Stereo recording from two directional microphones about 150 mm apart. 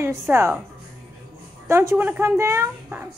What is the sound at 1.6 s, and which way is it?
A woman's voice, 15° right (ahead or behind).